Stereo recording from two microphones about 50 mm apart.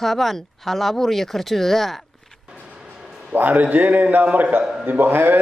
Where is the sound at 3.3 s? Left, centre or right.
Right.